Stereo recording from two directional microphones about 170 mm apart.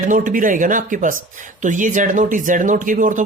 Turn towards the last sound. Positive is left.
turn(degrees=-50)  # may be behind; listen again after turning